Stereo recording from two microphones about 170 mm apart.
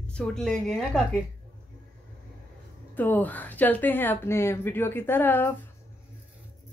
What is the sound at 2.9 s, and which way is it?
Speech, 10° left (ahead or behind).